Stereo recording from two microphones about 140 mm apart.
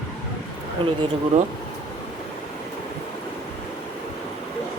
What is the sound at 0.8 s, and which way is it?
Speech, 40° right (ahead or behind).